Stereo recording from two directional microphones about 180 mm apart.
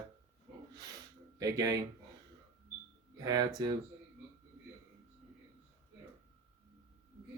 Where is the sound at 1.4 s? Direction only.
20° right (ahead or behind).